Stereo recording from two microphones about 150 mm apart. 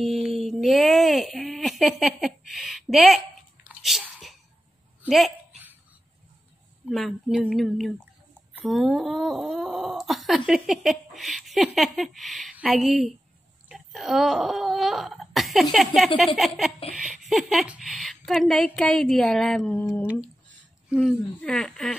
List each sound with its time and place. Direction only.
0.0 s a sound: centre (ahead or behind)
3.6 s chewing: 5° right (ahead or behind)
5.0 s speech: centre (ahead or behind)
6.9 s speech: centre (ahead or behind)
13.7 s cough: centre (ahead or behind)
16.3 s speech: centre (ahead or behind)
20.9 s speech: centre (ahead or behind)